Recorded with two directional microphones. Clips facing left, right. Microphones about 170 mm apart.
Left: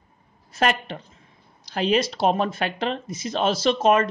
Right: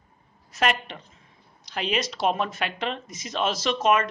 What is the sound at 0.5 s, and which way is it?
A woman's voice, 35° left (ahead or behind).